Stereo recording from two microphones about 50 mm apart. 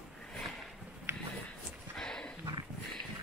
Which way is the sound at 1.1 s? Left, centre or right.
Right.